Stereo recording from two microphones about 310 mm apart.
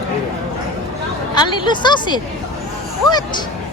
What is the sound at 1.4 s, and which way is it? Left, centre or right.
A woman's voice, centre.